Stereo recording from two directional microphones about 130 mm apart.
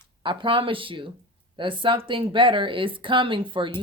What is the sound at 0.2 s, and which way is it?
Speech, 40° right (ahead or behind).